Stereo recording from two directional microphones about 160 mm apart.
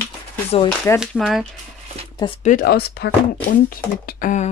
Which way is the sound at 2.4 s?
65° left (ahead or behind).